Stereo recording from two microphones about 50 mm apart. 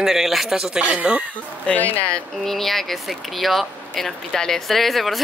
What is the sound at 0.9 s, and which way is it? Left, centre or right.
Speech, right.